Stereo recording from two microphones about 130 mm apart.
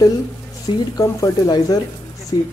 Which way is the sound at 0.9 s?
25° left (ahead or behind).